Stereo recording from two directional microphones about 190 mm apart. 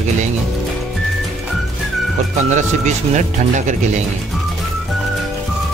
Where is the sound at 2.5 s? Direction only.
40° right (ahead or behind).